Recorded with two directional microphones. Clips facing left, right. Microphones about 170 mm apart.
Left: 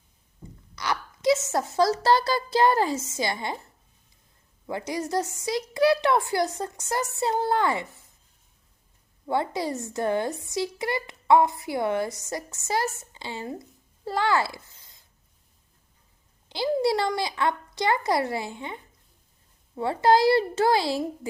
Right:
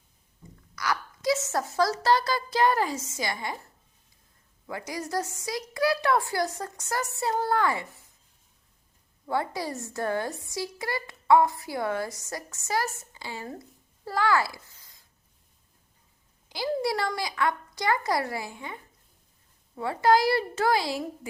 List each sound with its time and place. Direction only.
0.8 s a child's voice: 25° left (ahead or behind)
4.6 s speech: 25° left (ahead or behind)
9.2 s speech: 25° left (ahead or behind)
16.5 s speech: 25° left (ahead or behind)